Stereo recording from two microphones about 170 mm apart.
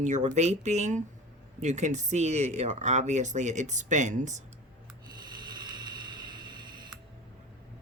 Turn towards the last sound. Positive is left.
turn(degrees=-25)  # may be behind; listen again after turning